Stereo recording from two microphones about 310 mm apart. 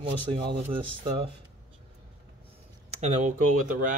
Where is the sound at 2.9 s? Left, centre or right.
Right.